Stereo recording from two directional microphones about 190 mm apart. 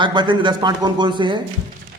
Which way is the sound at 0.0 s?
25° right (ahead or behind).